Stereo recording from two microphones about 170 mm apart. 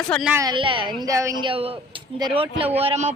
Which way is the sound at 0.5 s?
30° right (ahead or behind).